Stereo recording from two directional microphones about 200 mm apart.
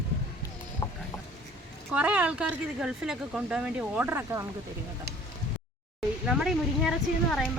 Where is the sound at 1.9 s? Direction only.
5° right (ahead or behind).